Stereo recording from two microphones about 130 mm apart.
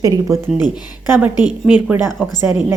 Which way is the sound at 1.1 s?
15° right (ahead or behind).